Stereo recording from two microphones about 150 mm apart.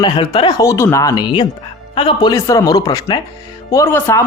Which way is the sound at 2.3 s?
20° left (ahead or behind).